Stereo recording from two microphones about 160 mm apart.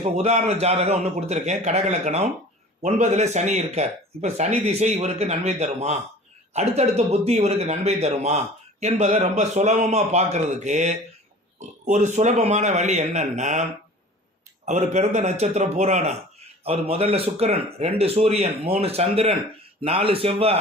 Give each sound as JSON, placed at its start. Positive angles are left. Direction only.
{"t": 0.0, "sound": "speech", "side_deg": -45}